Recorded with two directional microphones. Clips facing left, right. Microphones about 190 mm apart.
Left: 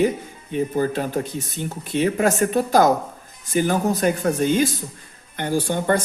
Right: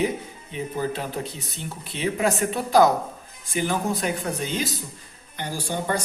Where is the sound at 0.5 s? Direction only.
50° left (ahead or behind).